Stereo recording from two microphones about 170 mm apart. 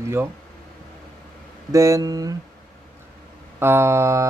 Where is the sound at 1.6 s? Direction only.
20° right (ahead or behind).